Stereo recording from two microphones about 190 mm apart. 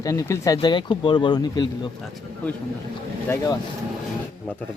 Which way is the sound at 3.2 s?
15° left (ahead or behind).